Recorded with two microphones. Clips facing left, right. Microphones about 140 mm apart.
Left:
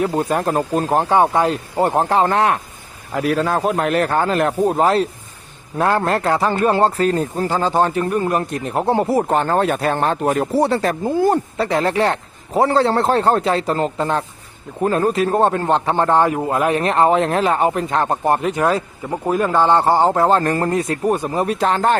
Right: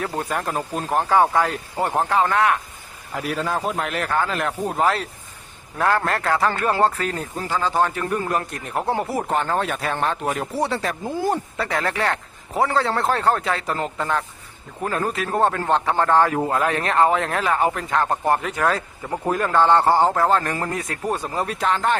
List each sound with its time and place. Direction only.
0.0 s speech: 25° left (ahead or behind)
0.5 s speech: 45° left (ahead or behind)
0.9 s speech: 30° left (ahead or behind)
1.8 s a man's voice: 30° left (ahead or behind)
3.2 s a man's voice: 60° left (ahead or behind)
11.5 s speech: 25° left (ahead or behind)
20.5 s speech: 40° left (ahead or behind)
20.7 s speech: 30° left (ahead or behind)
21.6 s a man's voice: 40° left (ahead or behind)